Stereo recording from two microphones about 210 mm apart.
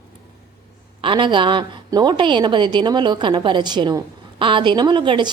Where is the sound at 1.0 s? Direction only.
25° right (ahead or behind).